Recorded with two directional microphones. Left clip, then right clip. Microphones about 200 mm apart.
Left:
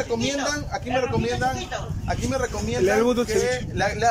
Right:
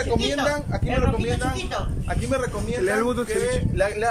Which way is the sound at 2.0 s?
5° left (ahead or behind).